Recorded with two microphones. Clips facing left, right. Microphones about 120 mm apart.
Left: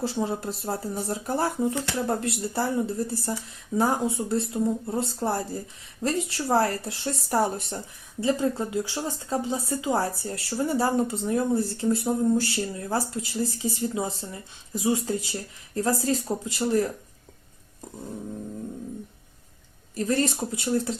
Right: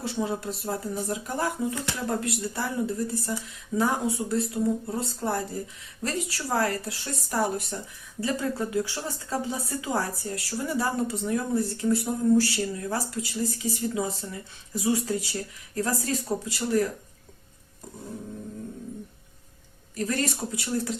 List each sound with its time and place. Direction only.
0.0 s speech: 30° left (ahead or behind)
20.0 s speech: 30° left (ahead or behind)